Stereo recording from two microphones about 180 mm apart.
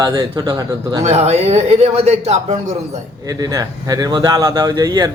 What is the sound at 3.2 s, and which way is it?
Speech, 20° right (ahead or behind).